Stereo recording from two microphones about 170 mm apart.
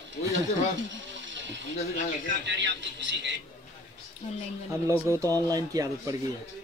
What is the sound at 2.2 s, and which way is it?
A man's voice, 90° right.